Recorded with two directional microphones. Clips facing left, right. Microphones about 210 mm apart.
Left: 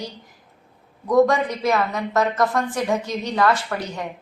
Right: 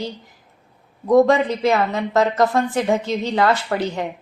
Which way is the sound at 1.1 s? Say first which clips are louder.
Right 3 dB; 25° right (ahead or behind).